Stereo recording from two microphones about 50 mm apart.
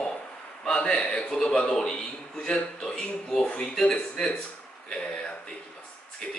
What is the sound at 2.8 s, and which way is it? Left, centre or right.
Speech, centre.